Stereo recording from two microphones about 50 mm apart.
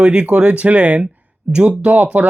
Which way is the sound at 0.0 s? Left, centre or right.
Right.